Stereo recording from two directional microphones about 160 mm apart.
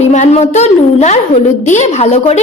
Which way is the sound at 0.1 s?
45° left (ahead or behind).